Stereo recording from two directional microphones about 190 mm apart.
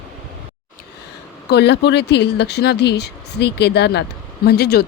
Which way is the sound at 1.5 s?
60° left (ahead or behind).